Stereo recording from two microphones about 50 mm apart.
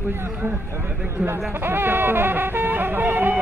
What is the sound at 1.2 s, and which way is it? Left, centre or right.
Speech, right.